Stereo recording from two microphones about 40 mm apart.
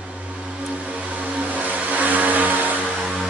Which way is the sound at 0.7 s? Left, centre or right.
Right.